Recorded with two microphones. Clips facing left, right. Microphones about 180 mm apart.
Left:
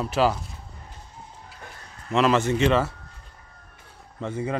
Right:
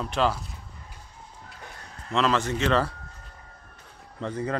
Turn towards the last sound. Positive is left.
turn(degrees=10)  # may be behind; listen again after turning